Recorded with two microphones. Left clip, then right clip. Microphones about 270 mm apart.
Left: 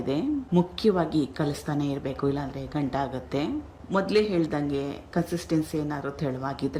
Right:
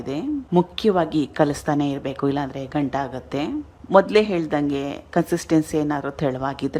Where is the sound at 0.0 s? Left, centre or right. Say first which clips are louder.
Right 1 dB; centre.